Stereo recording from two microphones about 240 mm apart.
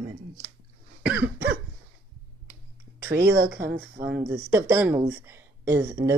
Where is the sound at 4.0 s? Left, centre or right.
Centre.